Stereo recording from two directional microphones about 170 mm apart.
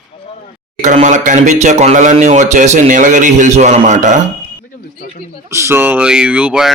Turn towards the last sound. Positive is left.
turn(degrees=-5)  # may be behind; listen again after turning